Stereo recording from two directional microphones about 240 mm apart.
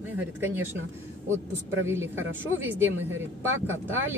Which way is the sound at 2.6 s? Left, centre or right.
Centre.